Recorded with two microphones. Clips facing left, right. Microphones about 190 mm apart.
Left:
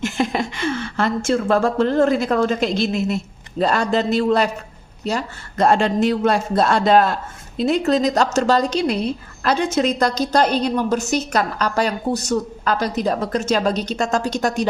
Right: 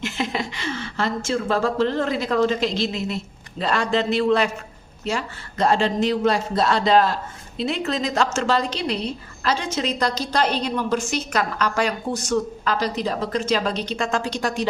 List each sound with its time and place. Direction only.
0.0 s a woman's voice: 50° left (ahead or behind)
3.6 s a woman's voice: 40° left (ahead or behind)
5.6 s a man's voice: 50° left (ahead or behind)